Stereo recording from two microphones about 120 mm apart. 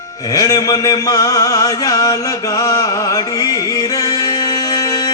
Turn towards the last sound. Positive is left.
turn(degrees=30)  # may be behind; listen again after turning